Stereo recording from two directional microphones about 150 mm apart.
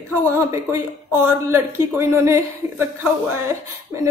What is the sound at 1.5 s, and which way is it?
A woman's voice, 15° right (ahead or behind).